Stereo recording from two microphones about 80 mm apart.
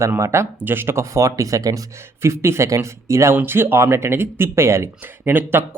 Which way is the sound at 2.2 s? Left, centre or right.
Right.